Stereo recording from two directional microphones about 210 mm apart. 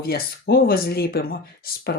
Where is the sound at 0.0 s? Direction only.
45° left (ahead or behind).